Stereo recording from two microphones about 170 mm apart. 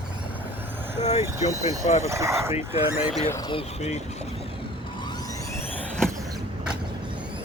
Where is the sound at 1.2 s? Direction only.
20° right (ahead or behind).